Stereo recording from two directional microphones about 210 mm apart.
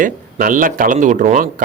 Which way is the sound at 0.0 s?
40° right (ahead or behind).